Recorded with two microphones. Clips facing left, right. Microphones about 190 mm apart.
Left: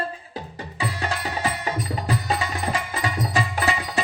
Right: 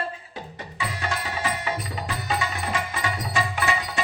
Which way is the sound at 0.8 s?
35° left (ahead or behind).